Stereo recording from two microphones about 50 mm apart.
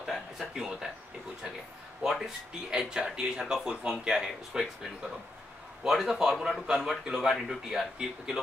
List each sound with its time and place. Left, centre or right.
0.0 s a sound: centre
2.0 s speech: centre
5.9 s speech: centre